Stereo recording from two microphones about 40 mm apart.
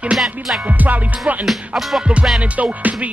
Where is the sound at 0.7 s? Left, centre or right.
Right.